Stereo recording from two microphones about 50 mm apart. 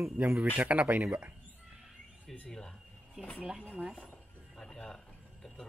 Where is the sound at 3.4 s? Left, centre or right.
Centre.